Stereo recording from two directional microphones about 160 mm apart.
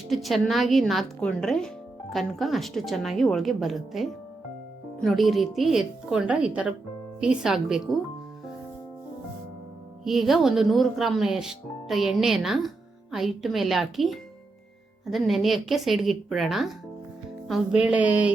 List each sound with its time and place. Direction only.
0.1 s speech: centre (ahead or behind)
10.0 s speech: centre (ahead or behind)